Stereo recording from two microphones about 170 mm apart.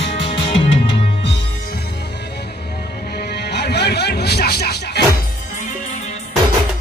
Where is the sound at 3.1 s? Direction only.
70° left (ahead or behind).